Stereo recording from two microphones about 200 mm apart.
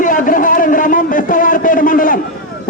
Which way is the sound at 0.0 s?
40° left (ahead or behind).